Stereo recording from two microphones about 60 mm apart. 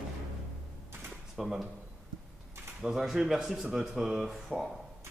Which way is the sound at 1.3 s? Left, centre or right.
Centre.